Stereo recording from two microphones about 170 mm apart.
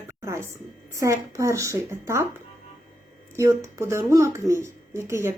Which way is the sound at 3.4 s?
15° right (ahead or behind).